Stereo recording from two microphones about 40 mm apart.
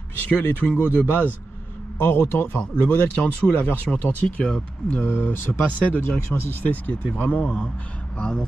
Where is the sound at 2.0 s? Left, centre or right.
Left.